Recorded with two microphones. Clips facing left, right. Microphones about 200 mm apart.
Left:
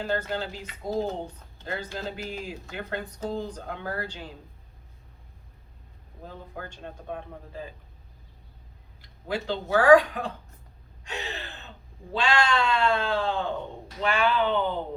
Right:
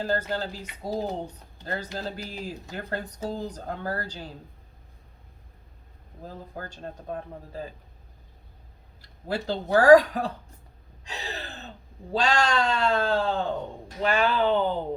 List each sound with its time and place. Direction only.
0.0 s a man's voice: 35° right (ahead or behind)
6.2 s a man's voice: 35° right (ahead or behind)
9.0 s speech: 40° right (ahead or behind)
11.0 s gasp: 35° right (ahead or behind)
12.1 s a man's voice: 40° right (ahead or behind)